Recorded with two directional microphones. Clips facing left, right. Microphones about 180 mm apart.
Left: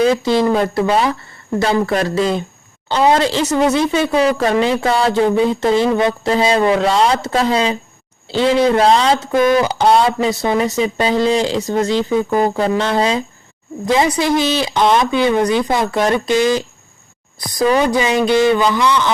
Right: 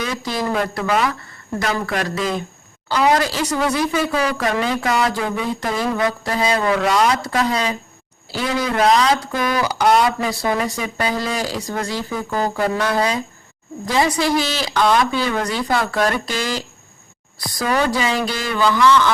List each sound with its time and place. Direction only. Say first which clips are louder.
0.0 s speech: left 10 dB; 25° left (ahead or behind)